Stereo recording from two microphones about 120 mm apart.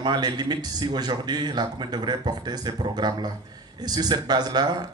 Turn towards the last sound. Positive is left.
turn(degrees=-35)  # may be behind; listen again after turning